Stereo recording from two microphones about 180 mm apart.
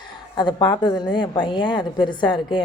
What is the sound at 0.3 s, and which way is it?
A woman's voice, 25° left (ahead or behind).